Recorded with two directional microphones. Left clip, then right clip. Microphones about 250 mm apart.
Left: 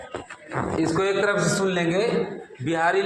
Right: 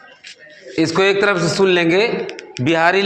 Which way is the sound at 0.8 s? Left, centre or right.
Right.